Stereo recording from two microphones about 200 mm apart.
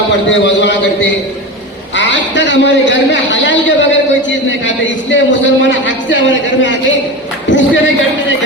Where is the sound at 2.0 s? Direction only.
65° left (ahead or behind).